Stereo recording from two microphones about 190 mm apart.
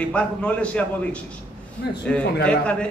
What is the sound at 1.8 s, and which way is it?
Speech, 60° left (ahead or behind).